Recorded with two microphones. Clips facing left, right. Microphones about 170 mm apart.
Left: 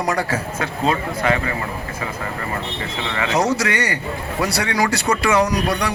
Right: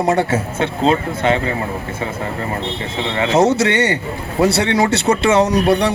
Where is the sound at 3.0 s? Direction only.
25° right (ahead or behind).